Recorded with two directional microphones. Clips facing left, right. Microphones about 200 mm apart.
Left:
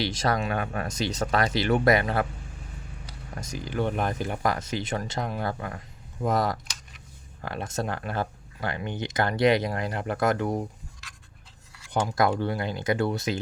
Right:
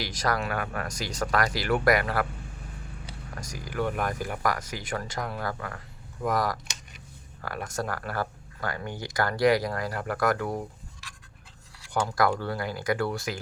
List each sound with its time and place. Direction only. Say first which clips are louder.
0.0 s speech: left 3 dB; 25° left (ahead or behind)
3.4 s speech: left 2 dB; 25° left (ahead or behind)
12.0 s speech: left 2 dB; 20° left (ahead or behind)